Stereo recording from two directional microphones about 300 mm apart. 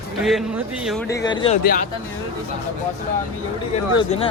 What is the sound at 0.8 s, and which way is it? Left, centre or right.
Speech, centre.